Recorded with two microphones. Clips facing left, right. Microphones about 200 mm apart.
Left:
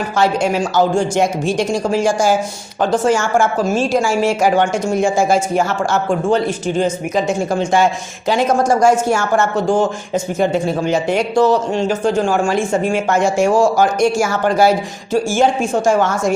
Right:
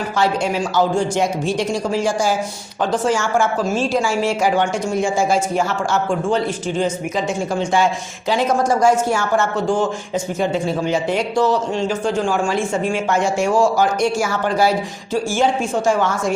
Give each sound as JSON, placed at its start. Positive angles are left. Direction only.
{"t": 0.2, "sound": "speech", "side_deg": 45}